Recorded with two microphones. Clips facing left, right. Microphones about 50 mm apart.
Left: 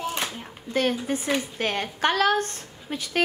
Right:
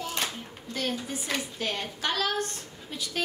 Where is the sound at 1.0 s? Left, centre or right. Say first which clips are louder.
Left 7 dB; left.